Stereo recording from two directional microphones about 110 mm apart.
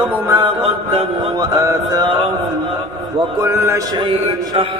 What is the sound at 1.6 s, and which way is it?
Mantra, 25° right (ahead or behind).